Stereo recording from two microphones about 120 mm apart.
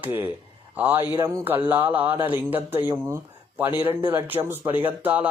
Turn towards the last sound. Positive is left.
turn(degrees=-15)  # may be behind; listen again after turning